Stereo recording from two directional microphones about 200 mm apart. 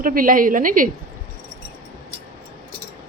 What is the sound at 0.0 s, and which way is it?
Speech, 45° right (ahead or behind).